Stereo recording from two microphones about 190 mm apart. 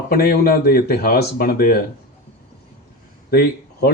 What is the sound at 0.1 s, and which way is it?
Speech, 55° left (ahead or behind).